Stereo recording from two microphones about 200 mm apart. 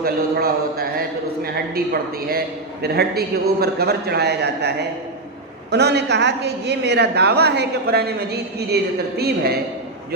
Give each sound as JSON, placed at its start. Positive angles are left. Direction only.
{"t": 0.0, "sound": "a man's voice", "side_deg": -50}
{"t": 5.7, "sound": "a woman's voice", "side_deg": -55}